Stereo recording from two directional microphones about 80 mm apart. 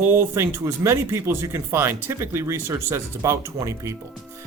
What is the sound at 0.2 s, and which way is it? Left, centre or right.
Speech, right.